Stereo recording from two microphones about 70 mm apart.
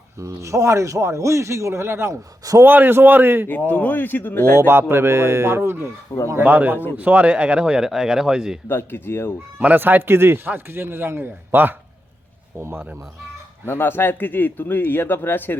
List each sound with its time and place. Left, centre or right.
0.2 s a man's voice: right
2.4 s speech: right
2.6 s a man's voice: right
3.7 s speech: left
4.5 s a man's voice: right
6.4 s a man's voice: right
8.6 s speech: left
9.6 s a man's voice: right
13.7 s speech: left